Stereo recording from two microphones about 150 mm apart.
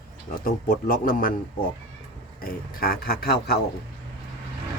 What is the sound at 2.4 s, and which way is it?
A man's voice, 80° left.